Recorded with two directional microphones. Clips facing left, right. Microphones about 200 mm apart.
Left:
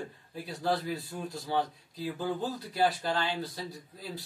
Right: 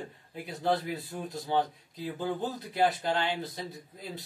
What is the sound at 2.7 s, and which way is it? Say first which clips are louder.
Speech: right 1 dB; 20° right (ahead or behind).